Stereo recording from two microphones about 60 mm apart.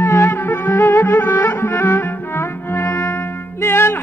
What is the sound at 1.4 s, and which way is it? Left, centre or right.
Music, left.